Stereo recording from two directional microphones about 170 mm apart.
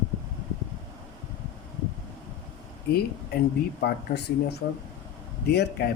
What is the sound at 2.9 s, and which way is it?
Speech, 65° left (ahead or behind).